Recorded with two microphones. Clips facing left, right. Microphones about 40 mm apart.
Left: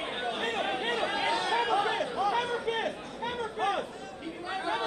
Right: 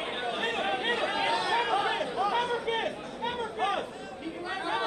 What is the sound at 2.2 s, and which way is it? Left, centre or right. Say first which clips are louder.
Chatter: right 1 dB; right.